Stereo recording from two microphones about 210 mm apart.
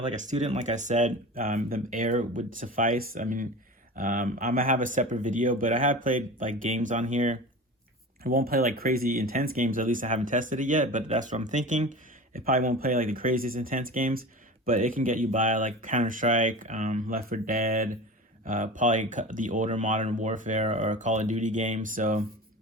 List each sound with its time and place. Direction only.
0.2 s speech: 35° right (ahead or behind)